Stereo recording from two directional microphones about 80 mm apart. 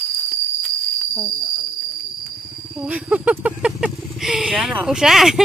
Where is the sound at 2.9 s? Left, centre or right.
Centre.